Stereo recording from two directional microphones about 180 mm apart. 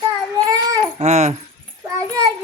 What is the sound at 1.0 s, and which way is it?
Speech, 40° right (ahead or behind).